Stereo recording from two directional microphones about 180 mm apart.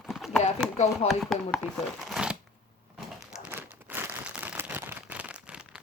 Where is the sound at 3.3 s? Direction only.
10° right (ahead or behind).